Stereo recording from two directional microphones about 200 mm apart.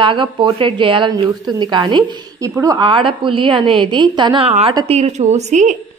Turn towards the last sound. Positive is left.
turn(degrees=-35)  # may be behind; listen again after turning